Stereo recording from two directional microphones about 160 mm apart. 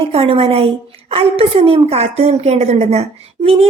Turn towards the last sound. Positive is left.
turn(degrees=-40)  # may be behind; listen again after turning